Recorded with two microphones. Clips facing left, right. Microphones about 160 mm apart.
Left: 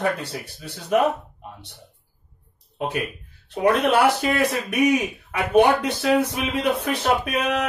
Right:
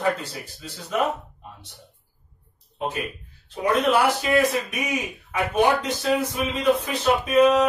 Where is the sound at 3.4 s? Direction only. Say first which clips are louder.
Left 2 dB; 65° left (ahead or behind).